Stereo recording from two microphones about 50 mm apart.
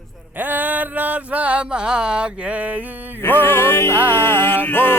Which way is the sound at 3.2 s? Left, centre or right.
Left.